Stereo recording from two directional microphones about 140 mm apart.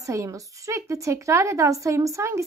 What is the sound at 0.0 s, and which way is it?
A woman's voice, 20° right (ahead or behind).